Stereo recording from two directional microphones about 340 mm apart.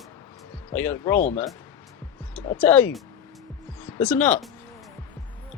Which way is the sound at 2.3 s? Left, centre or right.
Centre.